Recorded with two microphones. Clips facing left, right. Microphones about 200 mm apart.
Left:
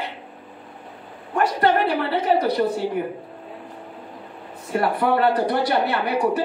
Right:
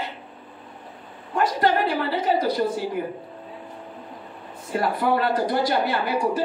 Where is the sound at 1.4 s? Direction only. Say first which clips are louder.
Left 2 dB; 60° left (ahead or behind).